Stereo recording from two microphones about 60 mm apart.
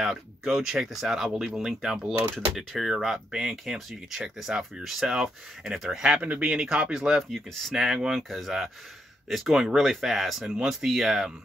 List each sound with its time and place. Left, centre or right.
0.0 s speech: centre
7.2 s speech: centre
7.7 s speech: centre